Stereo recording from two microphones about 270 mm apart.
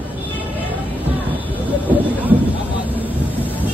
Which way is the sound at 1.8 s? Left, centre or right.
Centre.